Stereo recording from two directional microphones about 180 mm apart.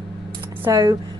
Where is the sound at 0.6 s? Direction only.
20° right (ahead or behind).